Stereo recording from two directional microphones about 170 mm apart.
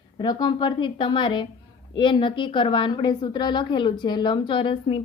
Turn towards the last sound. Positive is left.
turn(degrees=30)  # may be behind; listen again after turning